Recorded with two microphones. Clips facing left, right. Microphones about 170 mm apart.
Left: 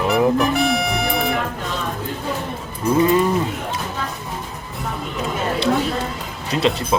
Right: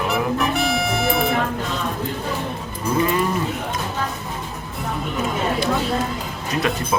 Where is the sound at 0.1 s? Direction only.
Centre (ahead or behind).